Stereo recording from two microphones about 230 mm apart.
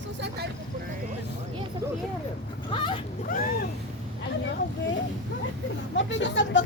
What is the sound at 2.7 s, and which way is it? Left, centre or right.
Vehicle, centre.